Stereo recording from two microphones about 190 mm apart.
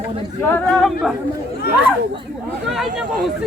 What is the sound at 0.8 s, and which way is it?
Speech, 5° right (ahead or behind).